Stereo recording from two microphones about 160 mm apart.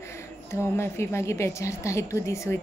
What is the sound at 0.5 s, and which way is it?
A woman's voice, 15° left (ahead or behind).